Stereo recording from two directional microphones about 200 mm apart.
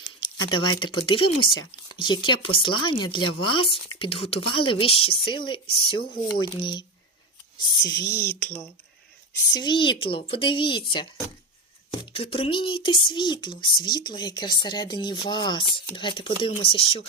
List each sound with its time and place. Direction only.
0.0 s a sound: 20° left (ahead or behind)
1.0 s speech: 25° left (ahead or behind)
9.5 s speech: 20° left (ahead or behind)